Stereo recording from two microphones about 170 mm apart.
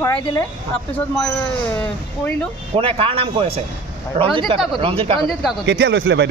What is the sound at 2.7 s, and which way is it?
A man's voice, 30° right (ahead or behind).